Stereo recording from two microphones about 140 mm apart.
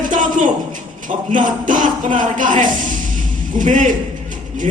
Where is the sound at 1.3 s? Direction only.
70° right (ahead or behind).